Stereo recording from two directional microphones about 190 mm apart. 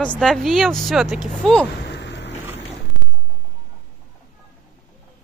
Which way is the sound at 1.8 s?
65° left (ahead or behind).